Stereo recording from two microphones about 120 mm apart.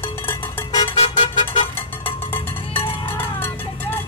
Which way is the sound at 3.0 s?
20° left (ahead or behind).